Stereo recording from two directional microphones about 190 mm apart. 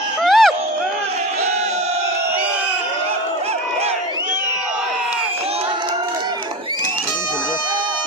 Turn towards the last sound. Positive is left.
turn(degrees=-25)  # may be behind; listen again after turning